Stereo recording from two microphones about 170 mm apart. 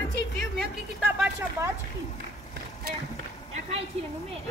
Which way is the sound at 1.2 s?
15° right (ahead or behind).